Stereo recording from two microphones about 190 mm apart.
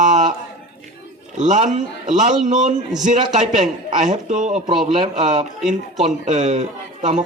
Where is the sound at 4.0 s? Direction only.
40° right (ahead or behind).